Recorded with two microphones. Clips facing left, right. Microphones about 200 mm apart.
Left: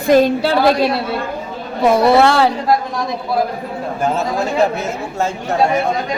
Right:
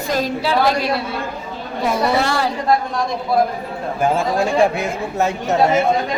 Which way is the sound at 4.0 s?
10° right (ahead or behind).